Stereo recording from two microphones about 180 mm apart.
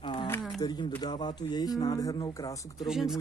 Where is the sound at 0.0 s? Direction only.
25° left (ahead or behind).